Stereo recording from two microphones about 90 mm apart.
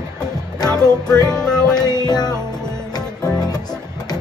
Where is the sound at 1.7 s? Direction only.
50° left (ahead or behind).